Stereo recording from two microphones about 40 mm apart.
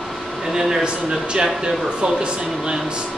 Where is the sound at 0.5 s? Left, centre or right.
Centre.